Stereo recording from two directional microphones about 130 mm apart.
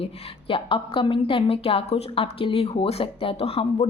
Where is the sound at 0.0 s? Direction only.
40° left (ahead or behind).